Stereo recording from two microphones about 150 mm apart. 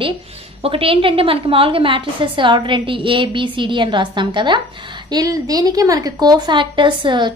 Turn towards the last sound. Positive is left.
turn(degrees=-30)  # may be behind; listen again after turning